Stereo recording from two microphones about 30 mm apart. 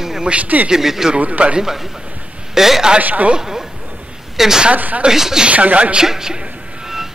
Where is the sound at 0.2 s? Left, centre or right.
Right.